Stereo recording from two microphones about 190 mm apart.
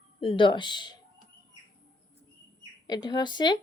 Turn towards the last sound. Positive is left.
turn(degrees=20)  # may be behind; listen again after turning